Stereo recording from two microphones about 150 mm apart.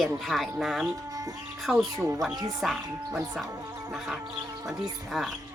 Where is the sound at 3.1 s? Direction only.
Centre (ahead or behind).